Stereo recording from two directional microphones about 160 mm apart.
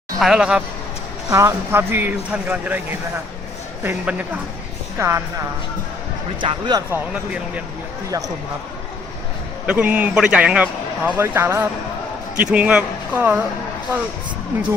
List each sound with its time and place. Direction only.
0.2 s speech: 5° right (ahead or behind)
1.3 s a man's voice: 20° right (ahead or behind)
3.8 s a man's voice: 10° right (ahead or behind)
6.4 s speech: 30° right (ahead or behind)
6.9 s a man's voice: 10° right (ahead or behind)
9.6 s a man's voice: 10° right (ahead or behind)